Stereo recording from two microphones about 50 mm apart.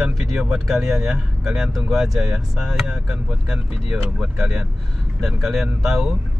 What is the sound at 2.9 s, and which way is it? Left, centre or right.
Speech, centre.